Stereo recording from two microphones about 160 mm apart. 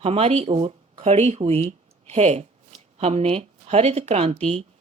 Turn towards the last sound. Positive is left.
turn(degrees=-40)  # may be behind; listen again after turning